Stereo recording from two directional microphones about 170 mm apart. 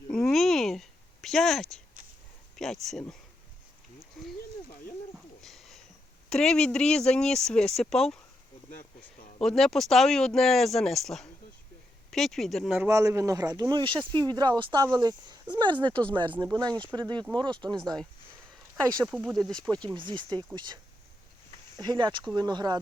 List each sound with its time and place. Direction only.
0.1 s a sound: 5° left (ahead or behind)
2.6 s speech: 5° left (ahead or behind)
5.4 s a sound: centre (ahead or behind)
6.3 s speech: 5° left (ahead or behind)
9.4 s speech: centre (ahead or behind)
12.9 s speech: 20° right (ahead or behind)
15.9 s speech: 10° left (ahead or behind)
16.4 s speech: 25° right (ahead or behind)
19.0 s speech: centre (ahead or behind)
19.8 s speech: 30° right (ahead or behind)
21.8 s speech: 25° right (ahead or behind)